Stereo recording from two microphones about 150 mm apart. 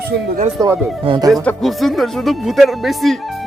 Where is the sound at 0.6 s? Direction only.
25° right (ahead or behind).